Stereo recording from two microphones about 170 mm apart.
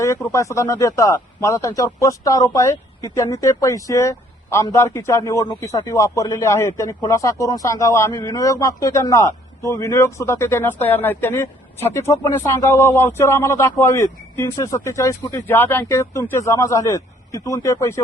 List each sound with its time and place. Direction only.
0.0 s speech: 15° left (ahead or behind)